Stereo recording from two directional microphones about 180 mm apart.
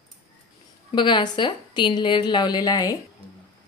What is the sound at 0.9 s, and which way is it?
A woman's voice, 25° left (ahead or behind).